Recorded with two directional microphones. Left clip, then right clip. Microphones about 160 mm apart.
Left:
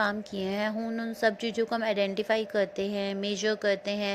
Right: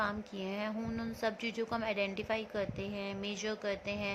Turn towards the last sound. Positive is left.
turn(degrees=45)  # may be behind; listen again after turning